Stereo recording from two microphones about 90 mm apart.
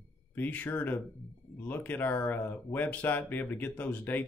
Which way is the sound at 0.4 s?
20° left (ahead or behind).